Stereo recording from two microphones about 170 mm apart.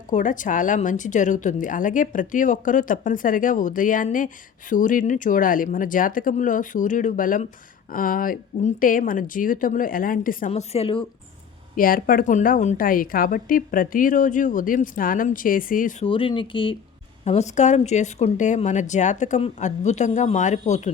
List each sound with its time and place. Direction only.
0.1 s a woman's voice: 50° left (ahead or behind)
10.5 s speech: 40° left (ahead or behind)
11.8 s a woman's voice: 55° left (ahead or behind)
16.0 s speech: 30° left (ahead or behind)
17.2 s a woman's voice: 40° left (ahead or behind)